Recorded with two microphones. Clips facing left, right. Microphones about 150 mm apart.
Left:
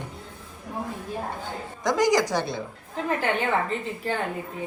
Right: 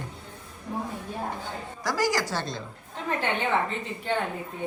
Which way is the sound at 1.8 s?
20° left (ahead or behind).